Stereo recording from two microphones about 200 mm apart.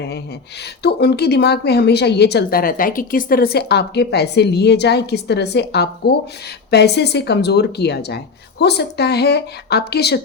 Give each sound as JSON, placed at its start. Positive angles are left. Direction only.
{"t": 0.8, "sound": "a woman's voice", "side_deg": 55}